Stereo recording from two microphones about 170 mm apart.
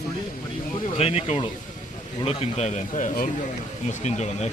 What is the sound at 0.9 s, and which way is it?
Speech, 40° left (ahead or behind).